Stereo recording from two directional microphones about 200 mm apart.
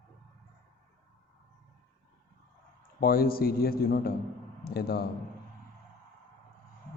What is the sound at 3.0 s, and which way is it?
A man's voice, 50° left (ahead or behind).